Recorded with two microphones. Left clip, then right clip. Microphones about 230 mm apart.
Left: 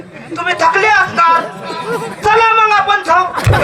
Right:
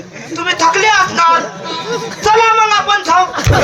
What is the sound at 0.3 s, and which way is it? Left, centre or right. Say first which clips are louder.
A man's voice: even; centre.